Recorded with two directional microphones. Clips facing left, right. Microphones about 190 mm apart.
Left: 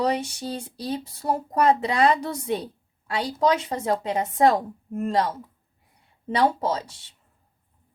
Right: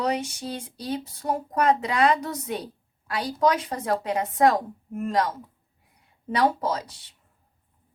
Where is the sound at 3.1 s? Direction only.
25° left (ahead or behind).